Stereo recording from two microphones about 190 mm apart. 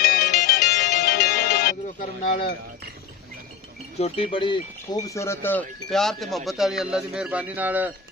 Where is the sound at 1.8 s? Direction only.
40° left (ahead or behind).